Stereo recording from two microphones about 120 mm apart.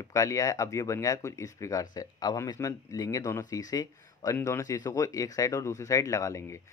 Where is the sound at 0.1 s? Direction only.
25° left (ahead or behind).